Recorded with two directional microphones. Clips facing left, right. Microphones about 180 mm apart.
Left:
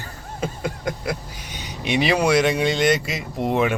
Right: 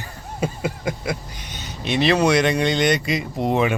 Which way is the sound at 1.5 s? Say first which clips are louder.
Left 1 dB; 15° left (ahead or behind).